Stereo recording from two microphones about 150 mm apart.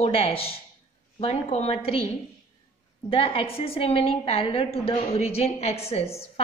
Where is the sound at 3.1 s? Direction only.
40° left (ahead or behind).